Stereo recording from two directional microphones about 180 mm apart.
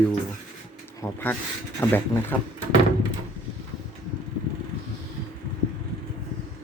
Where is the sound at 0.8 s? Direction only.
10° left (ahead or behind).